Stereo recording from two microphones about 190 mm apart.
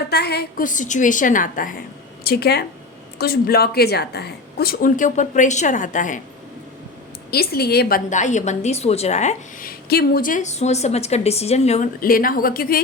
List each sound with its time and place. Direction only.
0.1 s a woman's voice: 55° left (ahead or behind)
2.2 s a woman's voice: 55° left (ahead or behind)
7.3 s a woman's voice: 55° left (ahead or behind)